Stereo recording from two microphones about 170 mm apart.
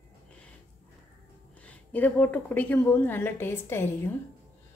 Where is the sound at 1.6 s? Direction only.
10° left (ahead or behind).